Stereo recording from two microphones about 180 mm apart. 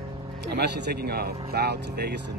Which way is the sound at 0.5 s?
70° right (ahead or behind).